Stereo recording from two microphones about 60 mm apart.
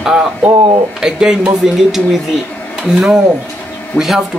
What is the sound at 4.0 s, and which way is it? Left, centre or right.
Speech, left.